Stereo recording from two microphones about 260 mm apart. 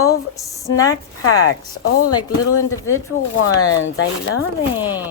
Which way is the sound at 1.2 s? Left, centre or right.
Left.